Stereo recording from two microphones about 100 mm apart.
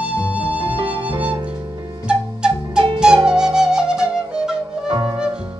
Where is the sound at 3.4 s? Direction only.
5° right (ahead or behind).